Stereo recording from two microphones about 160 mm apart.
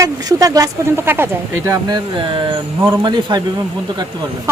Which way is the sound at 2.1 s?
30° right (ahead or behind).